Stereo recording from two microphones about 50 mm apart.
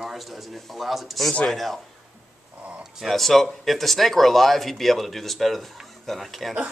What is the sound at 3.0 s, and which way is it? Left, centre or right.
Speech, centre.